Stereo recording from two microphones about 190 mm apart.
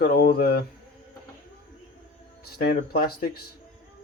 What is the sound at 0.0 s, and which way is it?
Speech, 55° left (ahead or behind).